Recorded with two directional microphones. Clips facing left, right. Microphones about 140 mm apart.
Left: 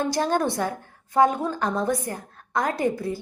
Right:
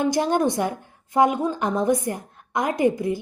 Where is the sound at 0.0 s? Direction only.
15° right (ahead or behind).